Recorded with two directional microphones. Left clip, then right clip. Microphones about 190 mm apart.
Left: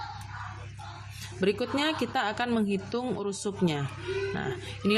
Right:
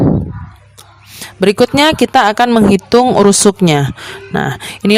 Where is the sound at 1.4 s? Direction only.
50° right (ahead or behind).